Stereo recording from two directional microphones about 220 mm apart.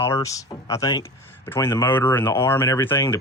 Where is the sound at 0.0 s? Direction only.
10° left (ahead or behind).